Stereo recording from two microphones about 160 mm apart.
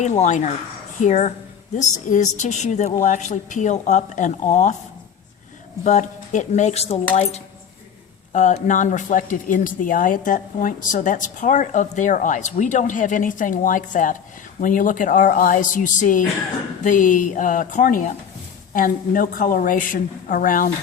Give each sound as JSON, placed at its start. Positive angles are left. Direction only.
{"t": 0.0, "sound": "speech", "side_deg": 45}
{"t": 5.8, "sound": "a woman's voice", "side_deg": 50}